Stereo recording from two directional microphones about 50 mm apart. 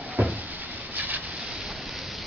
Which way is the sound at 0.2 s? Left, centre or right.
Right.